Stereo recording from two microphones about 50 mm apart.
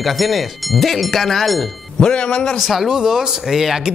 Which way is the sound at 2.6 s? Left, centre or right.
Centre.